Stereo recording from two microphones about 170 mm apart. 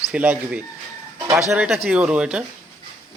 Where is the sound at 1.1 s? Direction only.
20° right (ahead or behind).